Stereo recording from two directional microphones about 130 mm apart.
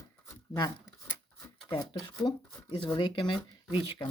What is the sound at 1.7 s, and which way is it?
Speech, 35° left (ahead or behind).